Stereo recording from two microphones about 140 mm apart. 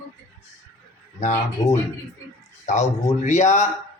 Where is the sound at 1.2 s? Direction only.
55° left (ahead or behind).